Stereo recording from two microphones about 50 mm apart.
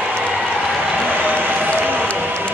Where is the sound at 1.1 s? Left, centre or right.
Right.